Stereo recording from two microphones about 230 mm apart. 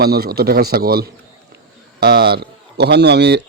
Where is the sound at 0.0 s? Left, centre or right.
Right.